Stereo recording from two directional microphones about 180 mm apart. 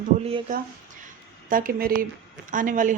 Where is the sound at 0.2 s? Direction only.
30° right (ahead or behind).